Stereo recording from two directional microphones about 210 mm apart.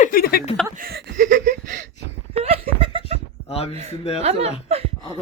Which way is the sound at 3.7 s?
30° right (ahead or behind).